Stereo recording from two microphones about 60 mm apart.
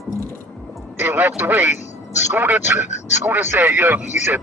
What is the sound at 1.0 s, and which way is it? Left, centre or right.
Speech, right.